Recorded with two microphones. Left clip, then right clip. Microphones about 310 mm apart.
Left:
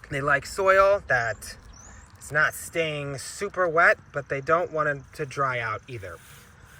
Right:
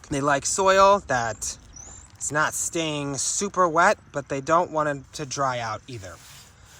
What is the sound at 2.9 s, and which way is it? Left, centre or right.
Speech, centre.